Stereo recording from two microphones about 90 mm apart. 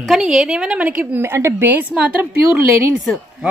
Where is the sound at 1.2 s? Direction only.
30° right (ahead or behind).